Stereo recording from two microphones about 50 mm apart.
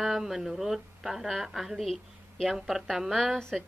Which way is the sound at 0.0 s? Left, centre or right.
Centre.